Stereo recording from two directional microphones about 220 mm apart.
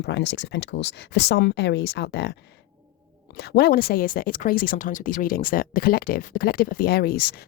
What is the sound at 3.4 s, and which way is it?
Speech, 45° left (ahead or behind).